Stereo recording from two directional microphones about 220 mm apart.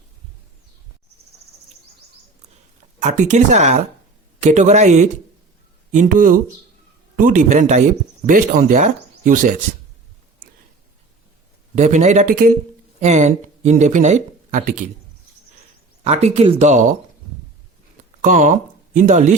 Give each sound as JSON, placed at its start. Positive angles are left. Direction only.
{"t": 3.0, "sound": "speech", "side_deg": -30}
{"t": 11.7, "sound": "speech", "side_deg": -30}
{"t": 16.0, "sound": "speech", "side_deg": -30}
{"t": 18.2, "sound": "speech", "side_deg": -35}